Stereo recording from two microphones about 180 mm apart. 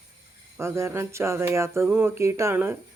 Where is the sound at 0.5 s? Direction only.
15° right (ahead or behind).